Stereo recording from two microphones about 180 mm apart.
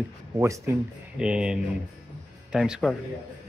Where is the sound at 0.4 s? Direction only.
15° right (ahead or behind).